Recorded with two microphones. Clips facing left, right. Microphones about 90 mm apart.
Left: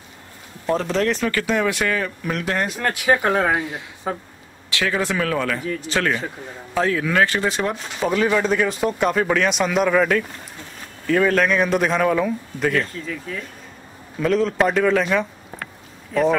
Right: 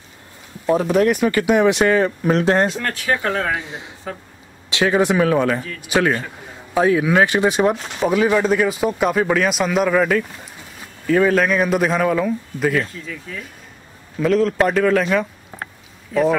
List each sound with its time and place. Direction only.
0.7 s speech: 10° right (ahead or behind); by 2.8 s 30° right (ahead or behind)
2.8 s speech: 15° left (ahead or behind)
4.6 s speech: 20° right (ahead or behind)
7.7 s speech: 5° right (ahead or behind)